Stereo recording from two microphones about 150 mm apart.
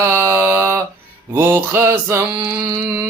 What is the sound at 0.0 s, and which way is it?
Mantra, 15° right (ahead or behind).